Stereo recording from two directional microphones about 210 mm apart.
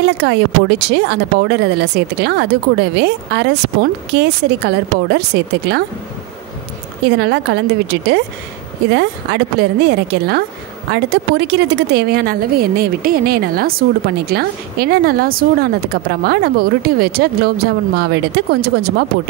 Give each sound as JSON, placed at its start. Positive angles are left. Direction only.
{"t": 0.0, "sound": "speech", "side_deg": -55}
{"t": 7.1, "sound": "speech", "side_deg": -55}